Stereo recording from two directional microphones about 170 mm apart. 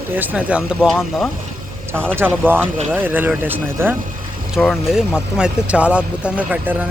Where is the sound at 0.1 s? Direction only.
10° right (ahead or behind).